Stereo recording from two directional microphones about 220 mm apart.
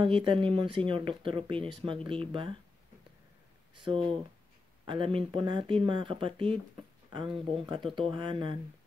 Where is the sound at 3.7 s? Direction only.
20° right (ahead or behind).